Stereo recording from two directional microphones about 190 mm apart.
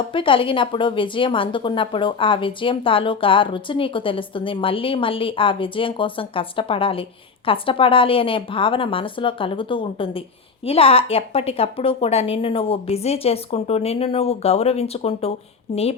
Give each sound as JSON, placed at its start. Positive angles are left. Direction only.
{"t": 0.1, "sound": "a woman's voice", "side_deg": 25}